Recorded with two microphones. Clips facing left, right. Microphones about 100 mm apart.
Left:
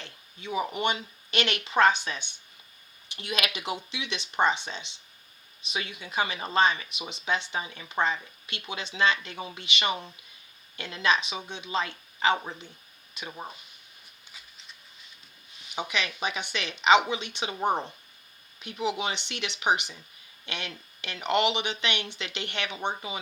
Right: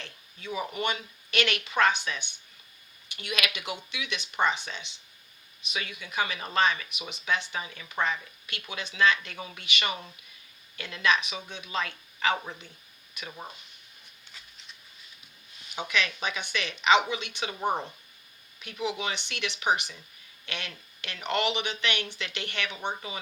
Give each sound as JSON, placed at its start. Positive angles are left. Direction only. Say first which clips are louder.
{"t": 0.0, "sound": "speech", "louder": "left 1 dB", "side_deg": 25}
{"t": 15.7, "sound": "speech", "louder": "right 1 dB", "side_deg": 20}